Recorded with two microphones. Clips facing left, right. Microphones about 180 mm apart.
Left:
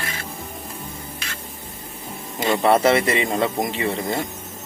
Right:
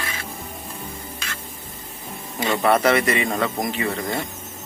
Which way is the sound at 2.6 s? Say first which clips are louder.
Left 1 dB; 25° left (ahead or behind).